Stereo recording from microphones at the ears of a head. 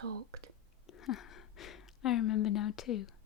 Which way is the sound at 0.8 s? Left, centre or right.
Left.